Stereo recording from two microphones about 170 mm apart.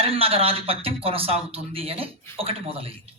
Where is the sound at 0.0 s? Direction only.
35° right (ahead or behind).